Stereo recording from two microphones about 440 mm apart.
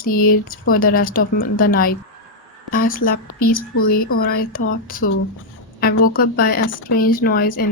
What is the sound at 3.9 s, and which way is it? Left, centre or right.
A woman's voice, left.